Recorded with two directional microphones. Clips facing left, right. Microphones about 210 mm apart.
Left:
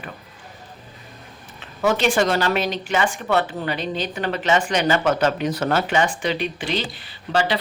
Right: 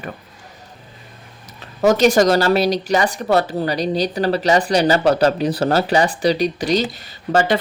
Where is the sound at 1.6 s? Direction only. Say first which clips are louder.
Right 6 dB; 40° right (ahead or behind).